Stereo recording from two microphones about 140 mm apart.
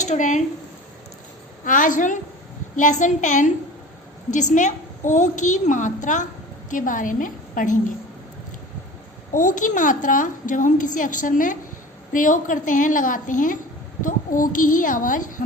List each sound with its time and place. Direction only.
0.0 s speech: 60° left (ahead or behind)
1.6 s a woman's voice: 70° left (ahead or behind)
9.3 s a woman's voice: 70° left (ahead or behind)